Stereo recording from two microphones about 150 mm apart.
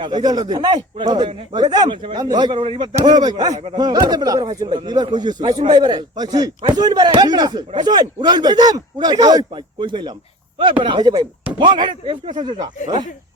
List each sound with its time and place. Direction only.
0.0 s speech: 30° right (ahead or behind)